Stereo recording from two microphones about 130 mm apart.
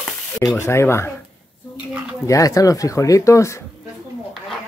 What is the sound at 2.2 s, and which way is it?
Speech, 25° left (ahead or behind).